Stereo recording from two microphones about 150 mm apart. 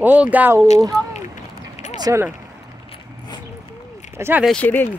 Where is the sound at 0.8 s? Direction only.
20° right (ahead or behind).